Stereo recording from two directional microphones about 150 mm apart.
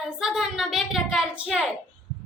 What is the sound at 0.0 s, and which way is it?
A woman's voice, centre (ahead or behind).